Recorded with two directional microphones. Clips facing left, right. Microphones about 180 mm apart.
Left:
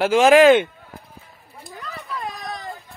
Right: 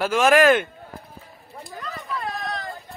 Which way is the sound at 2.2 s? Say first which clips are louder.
Right 2 dB; 20° left (ahead or behind).